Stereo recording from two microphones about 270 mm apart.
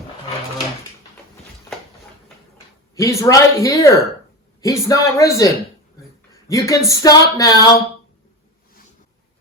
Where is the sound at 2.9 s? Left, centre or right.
Centre.